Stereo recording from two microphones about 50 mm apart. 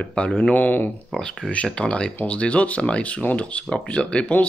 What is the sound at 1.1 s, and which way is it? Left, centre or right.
A man's voice, centre.